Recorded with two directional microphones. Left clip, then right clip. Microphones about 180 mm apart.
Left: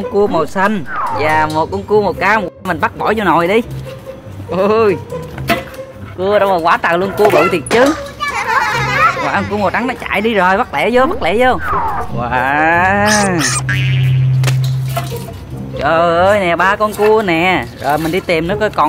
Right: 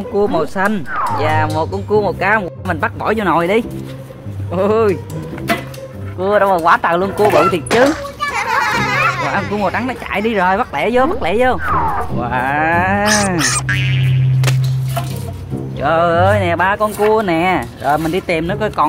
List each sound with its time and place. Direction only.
0.1 s speech: centre (ahead or behind)
6.1 s a child's voice: 5° right (ahead or behind)